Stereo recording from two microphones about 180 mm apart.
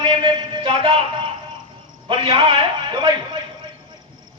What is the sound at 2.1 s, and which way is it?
A man's voice, 30° right (ahead or behind).